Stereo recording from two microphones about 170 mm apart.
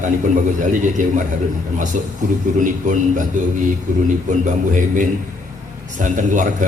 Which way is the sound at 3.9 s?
50° right (ahead or behind).